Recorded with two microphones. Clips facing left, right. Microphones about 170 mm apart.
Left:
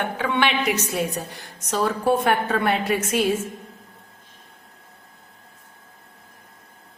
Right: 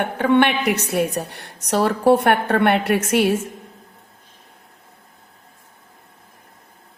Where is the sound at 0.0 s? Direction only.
55° right (ahead or behind).